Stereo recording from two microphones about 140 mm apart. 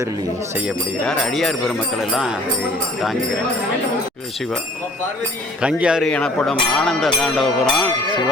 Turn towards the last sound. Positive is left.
turn(degrees=0)  # may be behind; listen again after turning